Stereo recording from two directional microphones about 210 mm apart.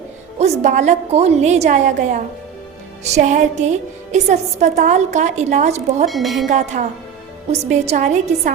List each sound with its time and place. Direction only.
0.3 s a woman's voice: 35° right (ahead or behind)
6.1 s speech: centre (ahead or behind)
6.5 s a woman's voice: 35° right (ahead or behind)